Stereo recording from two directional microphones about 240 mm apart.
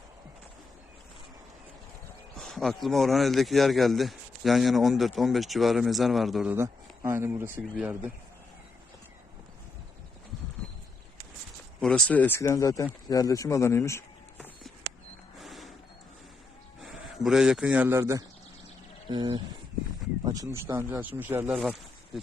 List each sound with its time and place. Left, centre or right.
2.4 s speech: centre
11.8 s speech: centre
15.4 s a sound: centre
17.2 s speech: centre